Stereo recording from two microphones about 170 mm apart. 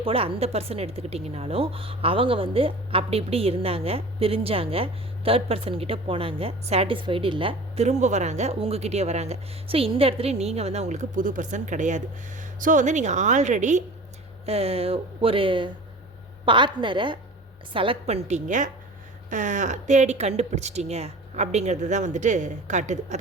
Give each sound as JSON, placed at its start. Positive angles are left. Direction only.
{"t": 0.0, "sound": "a woman's voice", "side_deg": -35}